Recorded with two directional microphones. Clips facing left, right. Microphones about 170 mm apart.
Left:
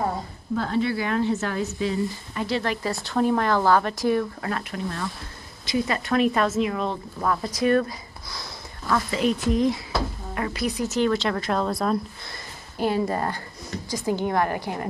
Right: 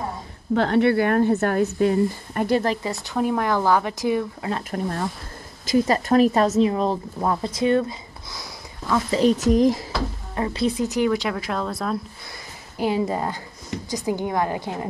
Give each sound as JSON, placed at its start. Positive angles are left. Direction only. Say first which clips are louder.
{"t": 0.6, "sound": "speech", "louder": "right 6 dB", "side_deg": -65}
{"t": 2.8, "sound": "speech", "louder": "left 1 dB", "side_deg": -20}
{"t": 4.6, "sound": "a woman's voice", "louder": "right 4 dB", "side_deg": -40}
{"t": 9.1, "sound": "a woman's voice", "louder": "right 7 dB", "side_deg": -35}
{"t": 10.3, "sound": "speech", "louder": "right 4 dB", "side_deg": -30}
{"t": 10.9, "sound": "speech", "louder": "right 1 dB", "side_deg": -15}
{"t": 12.7, "sound": "speech", "louder": "right 1 dB", "side_deg": -15}